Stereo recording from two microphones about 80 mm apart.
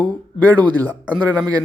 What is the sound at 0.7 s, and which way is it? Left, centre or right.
Speech, left.